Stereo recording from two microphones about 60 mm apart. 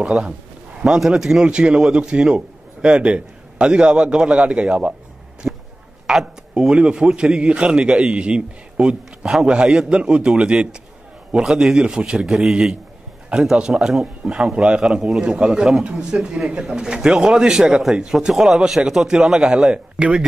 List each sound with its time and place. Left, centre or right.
0.0 s a man's voice: centre
5.4 s a sound: right
6.0 s a man's voice: centre
12.3 s a man's voice: centre
18.1 s a man's voice: centre